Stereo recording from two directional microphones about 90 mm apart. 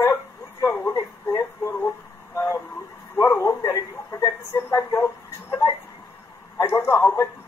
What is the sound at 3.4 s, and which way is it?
Radio, 40° left (ahead or behind).